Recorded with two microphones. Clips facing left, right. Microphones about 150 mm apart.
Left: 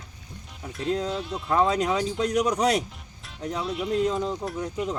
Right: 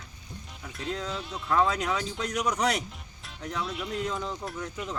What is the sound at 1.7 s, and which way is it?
Speech, 30° left (ahead or behind).